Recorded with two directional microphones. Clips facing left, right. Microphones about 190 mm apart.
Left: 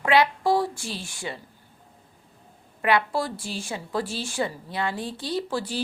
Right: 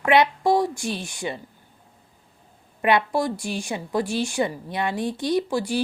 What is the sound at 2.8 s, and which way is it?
A woman's voice, 20° right (ahead or behind).